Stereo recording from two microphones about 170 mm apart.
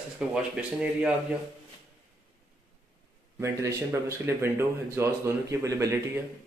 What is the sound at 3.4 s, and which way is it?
Speech, 15° right (ahead or behind).